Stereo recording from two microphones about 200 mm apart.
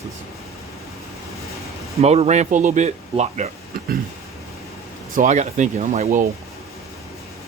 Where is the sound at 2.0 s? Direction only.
30° right (ahead or behind).